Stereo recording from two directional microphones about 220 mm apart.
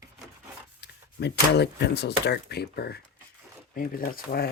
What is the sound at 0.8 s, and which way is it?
Speech, 50° left (ahead or behind).